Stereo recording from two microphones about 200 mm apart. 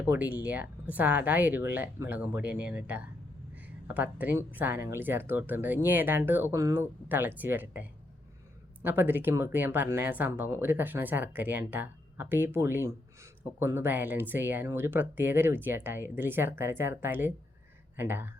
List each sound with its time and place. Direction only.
0.0 s speech: 10° right (ahead or behind)